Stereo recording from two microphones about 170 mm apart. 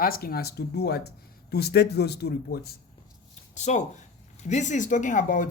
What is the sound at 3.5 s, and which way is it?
Speech, 45° left (ahead or behind).